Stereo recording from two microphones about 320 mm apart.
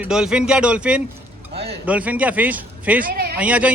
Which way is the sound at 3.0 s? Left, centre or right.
Right.